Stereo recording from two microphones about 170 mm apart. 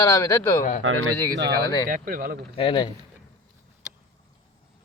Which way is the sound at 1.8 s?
55° right (ahead or behind).